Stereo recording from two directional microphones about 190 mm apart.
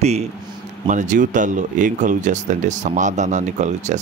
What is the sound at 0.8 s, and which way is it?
Speech, 40° right (ahead or behind).